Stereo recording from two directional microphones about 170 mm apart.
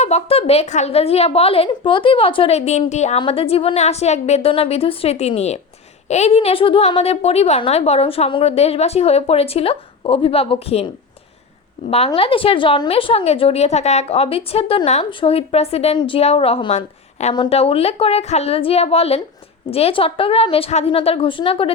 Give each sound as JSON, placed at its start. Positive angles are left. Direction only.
{"t": 0.0, "sound": "a woman's voice", "side_deg": 40}
{"t": 11.9, "sound": "a woman's voice", "side_deg": 35}